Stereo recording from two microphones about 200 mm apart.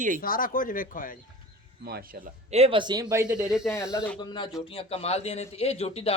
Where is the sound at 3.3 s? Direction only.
5° right (ahead or behind).